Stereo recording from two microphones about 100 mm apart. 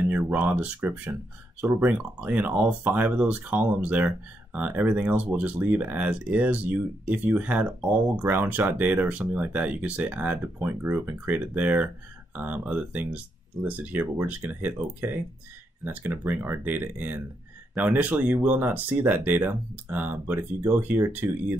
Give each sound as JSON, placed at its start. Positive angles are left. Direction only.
{"t": 0.0, "sound": "speech", "side_deg": -15}